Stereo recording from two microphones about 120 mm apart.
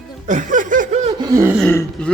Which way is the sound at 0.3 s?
90° right.